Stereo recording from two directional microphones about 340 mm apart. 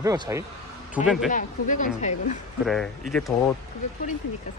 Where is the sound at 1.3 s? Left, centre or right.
Left.